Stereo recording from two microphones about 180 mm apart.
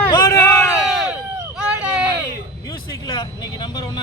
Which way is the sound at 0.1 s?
20° left (ahead or behind).